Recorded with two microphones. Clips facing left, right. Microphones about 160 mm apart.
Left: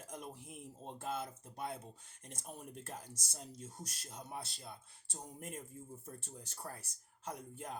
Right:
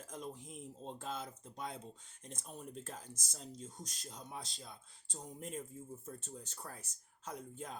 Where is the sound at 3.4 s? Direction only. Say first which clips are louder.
Right 1 dB; 10° left (ahead or behind).